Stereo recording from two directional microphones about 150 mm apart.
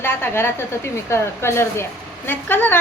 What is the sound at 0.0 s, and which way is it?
A woman's voice, 15° left (ahead or behind).